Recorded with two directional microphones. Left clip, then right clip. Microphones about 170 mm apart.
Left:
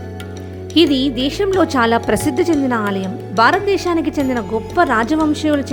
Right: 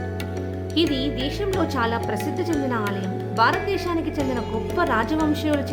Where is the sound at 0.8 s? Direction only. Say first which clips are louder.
Left 9 dB; 45° left (ahead or behind).